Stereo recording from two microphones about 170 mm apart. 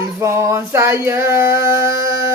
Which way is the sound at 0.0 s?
15° right (ahead or behind).